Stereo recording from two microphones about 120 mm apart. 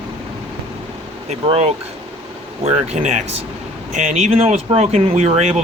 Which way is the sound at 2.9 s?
65° right (ahead or behind).